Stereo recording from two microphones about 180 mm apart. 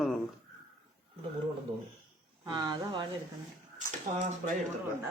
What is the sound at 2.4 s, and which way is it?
Speech, 20° right (ahead or behind).